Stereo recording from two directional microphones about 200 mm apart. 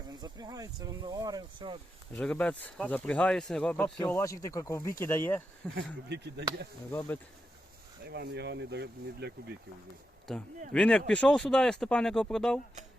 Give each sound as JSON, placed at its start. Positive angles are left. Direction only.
{"t": 0.1, "sound": "speech", "side_deg": -20}
{"t": 2.1, "sound": "speech", "side_deg": 5}
{"t": 5.7, "sound": "speech", "side_deg": -60}
{"t": 8.0, "sound": "speech", "side_deg": -55}
{"t": 10.3, "sound": "speech", "side_deg": 0}